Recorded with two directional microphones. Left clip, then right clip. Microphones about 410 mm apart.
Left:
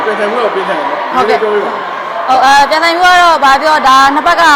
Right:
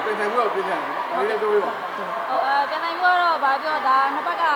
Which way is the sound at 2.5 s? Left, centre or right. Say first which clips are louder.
Left 15 dB; left.